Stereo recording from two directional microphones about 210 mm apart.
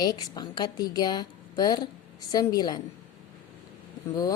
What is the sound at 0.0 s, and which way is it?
A woman's voice, 20° left (ahead or behind).